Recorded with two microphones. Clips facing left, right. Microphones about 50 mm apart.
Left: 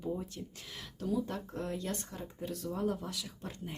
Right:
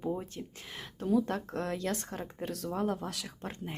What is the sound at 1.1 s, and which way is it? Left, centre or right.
Speech, right.